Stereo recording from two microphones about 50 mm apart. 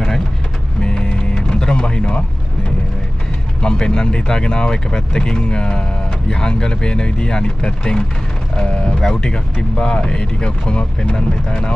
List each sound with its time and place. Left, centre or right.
0.7 s music: centre
3.6 s speech: centre